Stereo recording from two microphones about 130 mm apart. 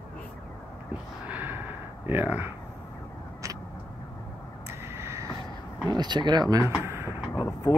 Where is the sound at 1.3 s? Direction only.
15° right (ahead or behind).